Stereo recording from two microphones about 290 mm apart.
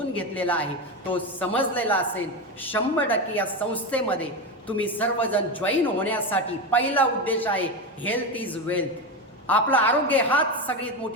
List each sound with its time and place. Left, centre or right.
0.1 s a woman's voice: centre